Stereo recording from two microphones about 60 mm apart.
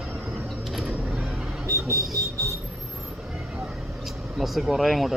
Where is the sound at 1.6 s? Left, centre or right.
Right.